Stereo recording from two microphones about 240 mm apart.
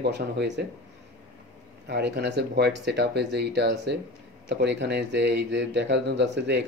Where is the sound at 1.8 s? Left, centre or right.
Right.